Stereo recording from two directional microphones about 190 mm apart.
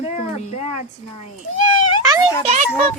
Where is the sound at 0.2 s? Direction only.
40° left (ahead or behind).